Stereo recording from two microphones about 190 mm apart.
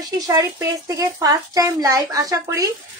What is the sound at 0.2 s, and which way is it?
Speech, 20° right (ahead or behind).